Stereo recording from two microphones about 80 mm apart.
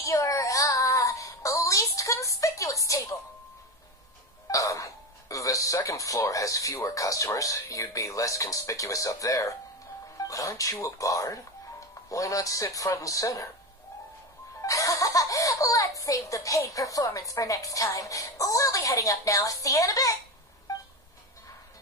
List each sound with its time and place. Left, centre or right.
0.0 s child singing: left
4.5 s speech: left
14.6 s speech: left